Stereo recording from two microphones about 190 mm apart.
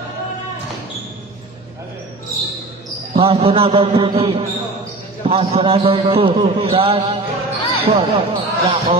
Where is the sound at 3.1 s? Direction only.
30° right (ahead or behind).